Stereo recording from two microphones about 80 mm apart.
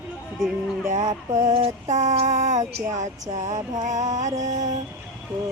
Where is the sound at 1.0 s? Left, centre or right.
Right.